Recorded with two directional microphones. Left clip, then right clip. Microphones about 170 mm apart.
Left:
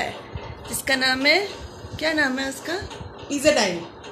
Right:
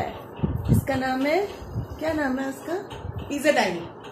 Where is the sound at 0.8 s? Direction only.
Centre (ahead or behind).